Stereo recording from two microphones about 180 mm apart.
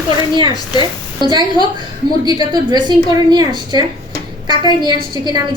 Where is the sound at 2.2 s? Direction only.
20° right (ahead or behind).